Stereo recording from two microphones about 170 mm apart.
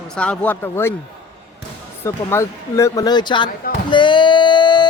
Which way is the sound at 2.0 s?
15° left (ahead or behind).